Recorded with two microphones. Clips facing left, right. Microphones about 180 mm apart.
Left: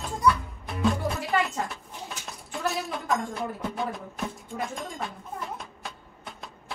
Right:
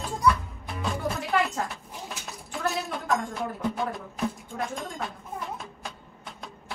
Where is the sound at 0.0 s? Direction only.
Centre (ahead or behind).